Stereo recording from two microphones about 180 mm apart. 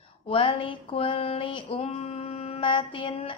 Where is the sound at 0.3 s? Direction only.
30° left (ahead or behind).